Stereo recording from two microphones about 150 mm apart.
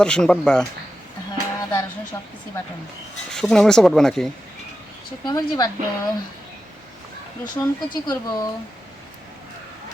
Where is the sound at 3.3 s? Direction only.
5° left (ahead or behind).